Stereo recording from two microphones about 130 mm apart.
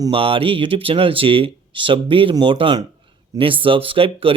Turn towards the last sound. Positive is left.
turn(degrees=-45)  # may be behind; listen again after turning